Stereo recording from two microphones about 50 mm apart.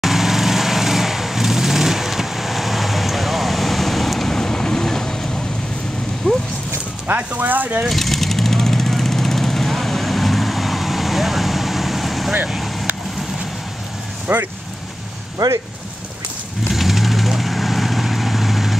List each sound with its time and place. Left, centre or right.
0.0 s vehicle: centre
6.2 s a sound: centre
7.1 s speech: right
7.9 s vehicle: centre
14.2 s speech: right
16.6 s vehicle: centre